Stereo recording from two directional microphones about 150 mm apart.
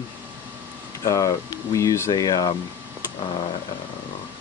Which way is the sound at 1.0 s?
20° left (ahead or behind).